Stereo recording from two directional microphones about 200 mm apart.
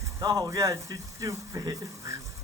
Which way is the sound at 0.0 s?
15° right (ahead or behind).